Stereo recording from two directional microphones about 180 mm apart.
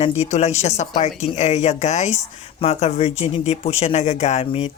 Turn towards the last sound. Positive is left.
turn(degrees=35)  # may be behind; listen again after turning